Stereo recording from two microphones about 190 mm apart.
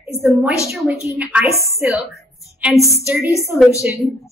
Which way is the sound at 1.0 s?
5° right (ahead or behind).